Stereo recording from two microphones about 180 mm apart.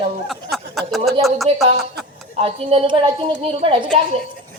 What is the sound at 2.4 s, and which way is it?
A woman's voice, 35° right (ahead or behind).